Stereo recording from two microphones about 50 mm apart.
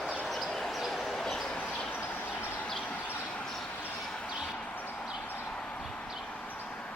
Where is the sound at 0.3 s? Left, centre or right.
Centre.